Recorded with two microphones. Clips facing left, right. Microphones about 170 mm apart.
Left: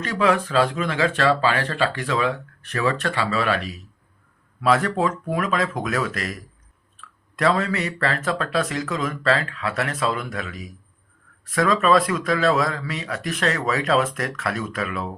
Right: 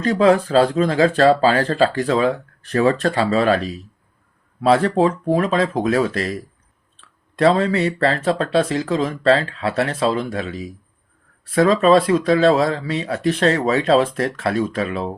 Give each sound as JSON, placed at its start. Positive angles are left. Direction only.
{"t": 0.0, "sound": "speech", "side_deg": -35}